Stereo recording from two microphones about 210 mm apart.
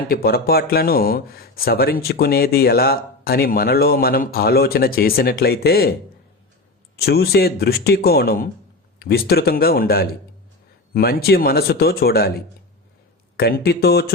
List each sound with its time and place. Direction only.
0.1 s speech: 45° left (ahead or behind)
6.9 s speech: 50° left (ahead or behind)